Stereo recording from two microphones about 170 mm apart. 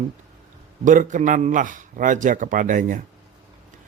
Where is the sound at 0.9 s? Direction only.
50° right (ahead or behind).